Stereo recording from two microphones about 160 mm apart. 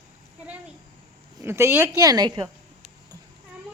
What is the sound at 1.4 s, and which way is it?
Speech, 15° right (ahead or behind).